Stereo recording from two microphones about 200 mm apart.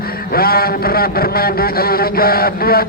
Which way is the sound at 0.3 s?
50° left (ahead or behind).